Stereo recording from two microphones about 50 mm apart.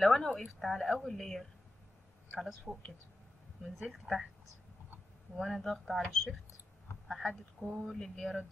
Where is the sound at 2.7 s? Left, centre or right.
Right.